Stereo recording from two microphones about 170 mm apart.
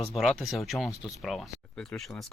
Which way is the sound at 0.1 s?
Centre (ahead or behind).